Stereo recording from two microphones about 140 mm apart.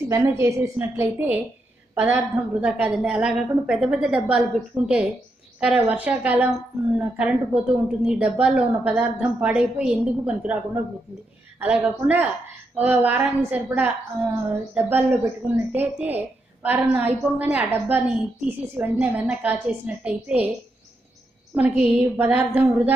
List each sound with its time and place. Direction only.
0.1 s a woman's voice: 20° right (ahead or behind)
21.5 s a woman's voice: 10° right (ahead or behind)